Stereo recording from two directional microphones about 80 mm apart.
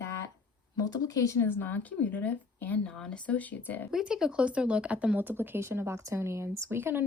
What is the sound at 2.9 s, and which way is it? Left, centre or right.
Speech, centre.